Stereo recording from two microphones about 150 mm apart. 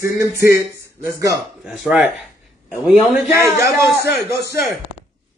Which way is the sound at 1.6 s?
5° right (ahead or behind).